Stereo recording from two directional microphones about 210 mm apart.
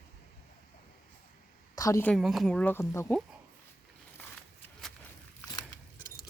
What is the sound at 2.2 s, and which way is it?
Speech, centre (ahead or behind).